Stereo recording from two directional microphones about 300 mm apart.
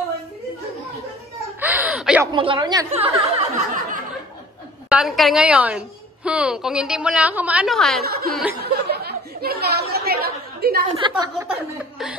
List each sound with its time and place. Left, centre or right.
1.6 s a sound: centre
2.3 s speech: centre
4.8 s a woman's voice: centre
8.0 s speech: right
8.3 s a woman's voice: centre
8.6 s chatter: right
11.0 s speech: centre